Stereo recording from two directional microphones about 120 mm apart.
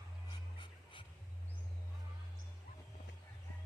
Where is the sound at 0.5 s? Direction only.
45° left (ahead or behind).